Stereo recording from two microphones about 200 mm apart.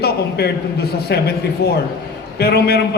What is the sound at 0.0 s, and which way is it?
A man's voice, 55° left (ahead or behind).